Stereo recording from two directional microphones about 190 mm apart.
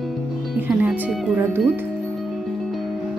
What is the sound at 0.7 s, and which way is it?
Speech, 5° right (ahead or behind).